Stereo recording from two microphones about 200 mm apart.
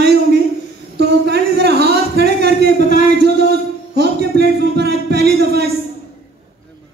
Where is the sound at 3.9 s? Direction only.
55° right (ahead or behind).